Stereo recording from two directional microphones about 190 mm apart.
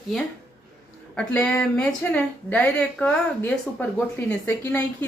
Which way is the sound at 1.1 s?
5° left (ahead or behind).